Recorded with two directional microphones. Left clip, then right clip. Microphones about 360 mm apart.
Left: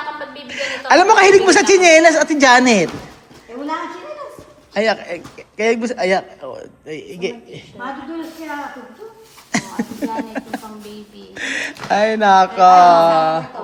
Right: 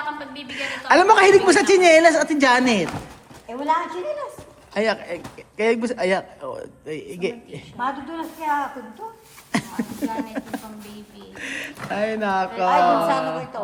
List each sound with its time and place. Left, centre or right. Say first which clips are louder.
0.5 s a man's voice: left 4 dB; centre
4.7 s a man's voice: left 5 dB; centre
9.5 s a man's voice: left 4 dB; centre